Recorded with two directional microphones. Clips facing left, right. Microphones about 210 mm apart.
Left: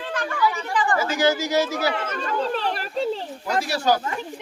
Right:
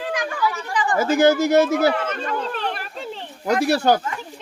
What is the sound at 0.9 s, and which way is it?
Speech, 55° right (ahead or behind).